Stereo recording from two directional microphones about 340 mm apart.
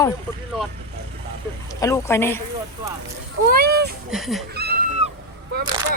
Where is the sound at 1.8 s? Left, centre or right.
Centre.